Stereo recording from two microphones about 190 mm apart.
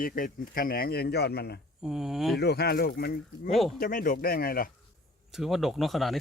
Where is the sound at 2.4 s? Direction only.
60° left (ahead or behind).